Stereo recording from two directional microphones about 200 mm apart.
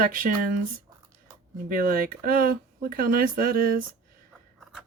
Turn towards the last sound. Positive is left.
turn(degrees=-45)  # may be behind; listen again after turning